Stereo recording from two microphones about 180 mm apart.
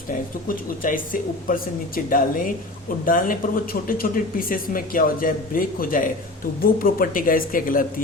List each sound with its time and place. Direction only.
0.4 s speech: 50° left (ahead or behind)